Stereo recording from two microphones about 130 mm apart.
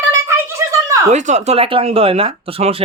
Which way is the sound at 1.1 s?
65° right (ahead or behind).